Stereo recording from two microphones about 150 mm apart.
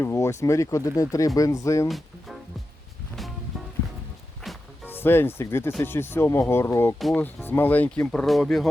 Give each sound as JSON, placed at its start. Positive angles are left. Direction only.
{"t": 0.0, "sound": "speech", "side_deg": 20}
{"t": 1.9, "sound": "music", "side_deg": 0}
{"t": 4.4, "sound": "music", "side_deg": 0}
{"t": 4.9, "sound": "speech", "side_deg": 15}